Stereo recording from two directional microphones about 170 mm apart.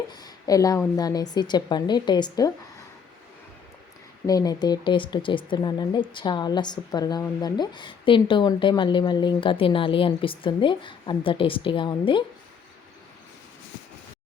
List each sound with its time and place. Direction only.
0.1 s a woman's voice: 25° left (ahead or behind)
4.3 s a woman's voice: 20° left (ahead or behind)